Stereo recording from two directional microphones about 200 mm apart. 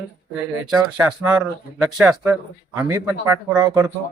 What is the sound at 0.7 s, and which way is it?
Speech, 10° right (ahead or behind).